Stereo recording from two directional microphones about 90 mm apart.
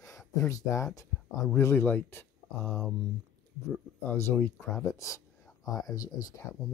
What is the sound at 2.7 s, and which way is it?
Speech, centre (ahead or behind).